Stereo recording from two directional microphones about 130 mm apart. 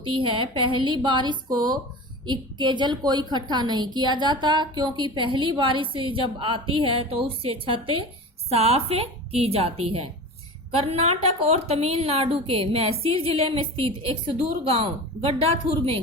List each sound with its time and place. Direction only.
0.0 s a woman's voice: 40° right (ahead or behind)